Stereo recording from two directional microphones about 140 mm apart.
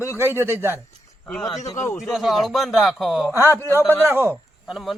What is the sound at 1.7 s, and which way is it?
Speech, 20° left (ahead or behind).